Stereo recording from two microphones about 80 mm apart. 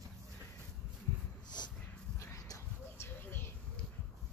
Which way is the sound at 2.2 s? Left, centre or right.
Left.